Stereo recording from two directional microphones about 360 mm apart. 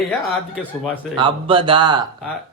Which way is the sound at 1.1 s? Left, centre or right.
Centre.